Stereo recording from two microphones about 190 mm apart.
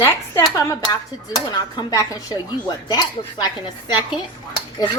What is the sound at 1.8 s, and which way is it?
A woman's voice, 20° left (ahead or behind).